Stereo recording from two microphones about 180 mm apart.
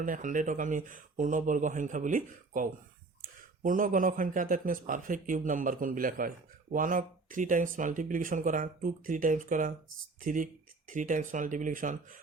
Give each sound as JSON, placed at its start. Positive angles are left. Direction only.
{"t": 0.0, "sound": "a man's voice", "side_deg": -45}